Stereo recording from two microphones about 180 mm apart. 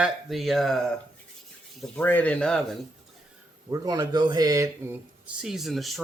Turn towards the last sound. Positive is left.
turn(degrees=0)  # may be behind; listen again after turning